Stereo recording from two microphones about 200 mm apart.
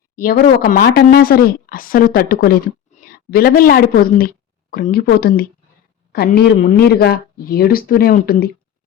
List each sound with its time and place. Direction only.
0.2 s speech: 45° left (ahead or behind)